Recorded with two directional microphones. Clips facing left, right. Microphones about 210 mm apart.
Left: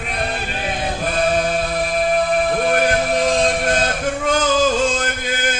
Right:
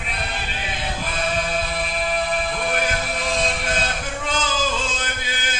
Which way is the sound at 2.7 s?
50° left (ahead or behind).